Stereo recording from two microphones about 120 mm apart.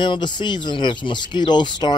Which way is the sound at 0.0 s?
40° left (ahead or behind).